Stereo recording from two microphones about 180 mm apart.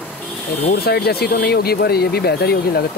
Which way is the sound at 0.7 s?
60° left (ahead or behind).